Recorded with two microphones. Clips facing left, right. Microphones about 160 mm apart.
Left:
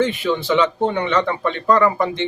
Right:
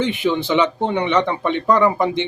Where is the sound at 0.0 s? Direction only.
20° right (ahead or behind).